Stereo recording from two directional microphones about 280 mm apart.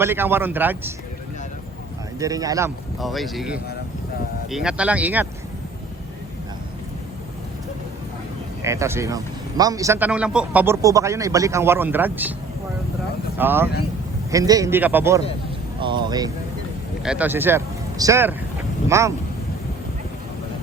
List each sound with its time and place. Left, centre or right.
0.0 s a man's voice: centre
2.1 s a man's voice: centre
3.0 s speech: centre
8.6 s a man's voice: centre
13.4 s a man's voice: centre
17.0 s speech: centre